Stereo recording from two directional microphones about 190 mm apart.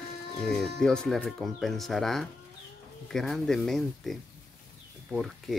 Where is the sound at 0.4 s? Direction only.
5° left (ahead or behind).